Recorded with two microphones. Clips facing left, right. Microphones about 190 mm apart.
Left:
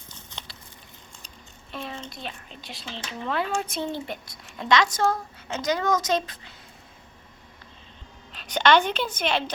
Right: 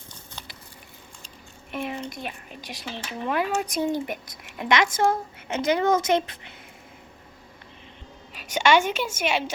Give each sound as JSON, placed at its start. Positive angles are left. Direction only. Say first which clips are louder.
{"t": 1.7, "sound": "a woman's voice", "louder": "right 5 dB", "side_deg": -15}
{"t": 8.3, "sound": "a woman's voice", "louder": "even", "side_deg": -10}